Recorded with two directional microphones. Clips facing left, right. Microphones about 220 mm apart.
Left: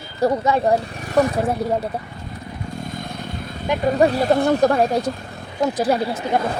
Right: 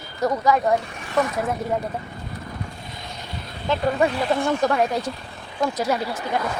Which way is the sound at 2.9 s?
50° left (ahead or behind).